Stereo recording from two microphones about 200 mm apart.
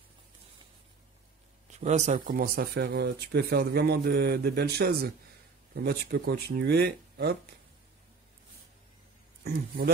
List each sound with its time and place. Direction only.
1.7 s speech: 35° right (ahead or behind); by 7.3 s 50° right (ahead or behind)
9.4 s speech: 50° right (ahead or behind)